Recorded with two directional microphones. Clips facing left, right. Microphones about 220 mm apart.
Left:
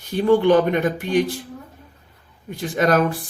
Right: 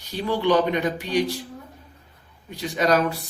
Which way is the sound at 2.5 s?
50° left (ahead or behind).